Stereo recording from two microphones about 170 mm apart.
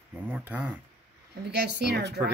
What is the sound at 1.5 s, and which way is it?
Speech, 75° right (ahead or behind).